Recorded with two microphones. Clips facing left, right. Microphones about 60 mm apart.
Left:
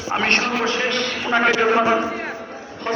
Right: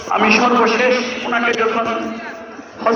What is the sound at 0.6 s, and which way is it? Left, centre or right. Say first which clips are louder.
Speech: right 8 dB; right.